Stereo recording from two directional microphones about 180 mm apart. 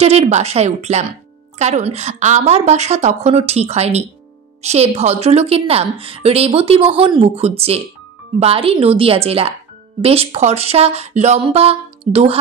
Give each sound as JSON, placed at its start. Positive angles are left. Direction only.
{"t": 0.0, "sound": "a woman's voice", "side_deg": -35}